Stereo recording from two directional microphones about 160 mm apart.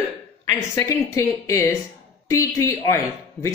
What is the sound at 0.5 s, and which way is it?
A woman's voice, 20° left (ahead or behind).